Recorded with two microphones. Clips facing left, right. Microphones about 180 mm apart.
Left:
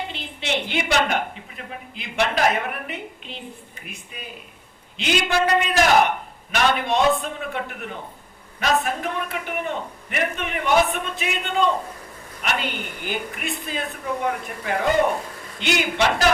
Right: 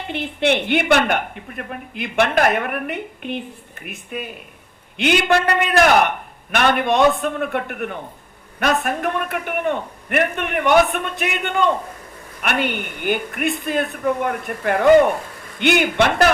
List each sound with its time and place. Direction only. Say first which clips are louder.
0.1 s a woman's voice: right 8 dB; 60° right (ahead or behind)